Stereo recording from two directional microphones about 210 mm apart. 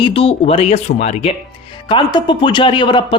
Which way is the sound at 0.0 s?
25° left (ahead or behind).